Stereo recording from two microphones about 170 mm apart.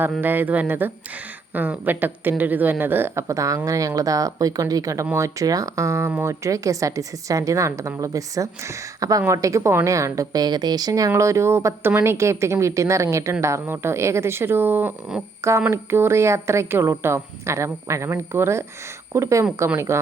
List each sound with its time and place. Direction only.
0.2 s a woman's voice: 10° right (ahead or behind)